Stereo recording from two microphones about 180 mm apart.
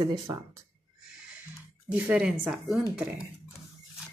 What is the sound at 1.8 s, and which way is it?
Speech, 5° right (ahead or behind).